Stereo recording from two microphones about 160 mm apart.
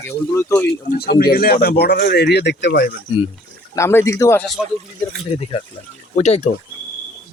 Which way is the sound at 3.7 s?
15° left (ahead or behind).